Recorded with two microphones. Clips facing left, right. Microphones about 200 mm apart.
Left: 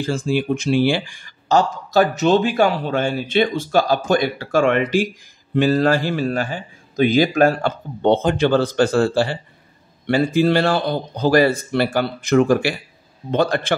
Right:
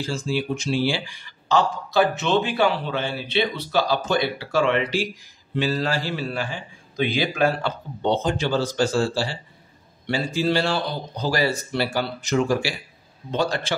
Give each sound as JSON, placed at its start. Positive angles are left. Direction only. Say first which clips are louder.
{"t": 0.0, "sound": "speech", "louder": "left 5 dB", "side_deg": 55}